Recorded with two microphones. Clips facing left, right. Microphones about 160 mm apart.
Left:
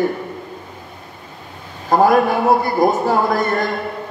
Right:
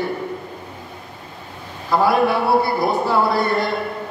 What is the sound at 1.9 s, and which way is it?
A man's voice, 45° left (ahead or behind).